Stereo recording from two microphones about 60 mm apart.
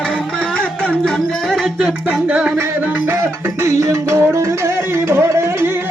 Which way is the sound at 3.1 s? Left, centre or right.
Right.